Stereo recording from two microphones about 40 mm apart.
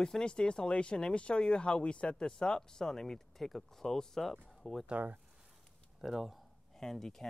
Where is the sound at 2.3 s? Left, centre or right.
Centre.